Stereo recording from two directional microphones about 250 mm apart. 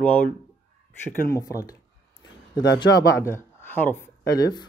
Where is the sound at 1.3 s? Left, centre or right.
Centre.